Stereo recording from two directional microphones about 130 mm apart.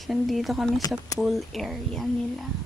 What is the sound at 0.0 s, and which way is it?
Speech, centre (ahead or behind).